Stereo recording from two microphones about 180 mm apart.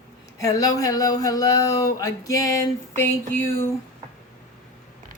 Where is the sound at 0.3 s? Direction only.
20° left (ahead or behind).